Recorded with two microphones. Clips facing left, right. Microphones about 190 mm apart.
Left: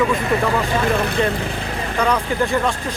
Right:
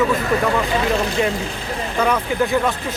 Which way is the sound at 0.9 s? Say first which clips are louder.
Even; 55° left (ahead or behind).